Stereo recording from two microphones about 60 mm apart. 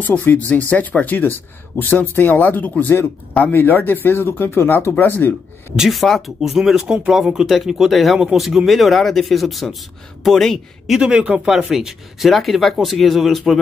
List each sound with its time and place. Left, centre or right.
0.0 s speech: left
5.8 s speech: centre
11.0 s speech: centre
11.4 s speech: centre